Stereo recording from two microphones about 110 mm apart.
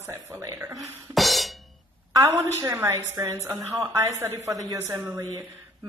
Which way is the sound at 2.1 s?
30° right (ahead or behind).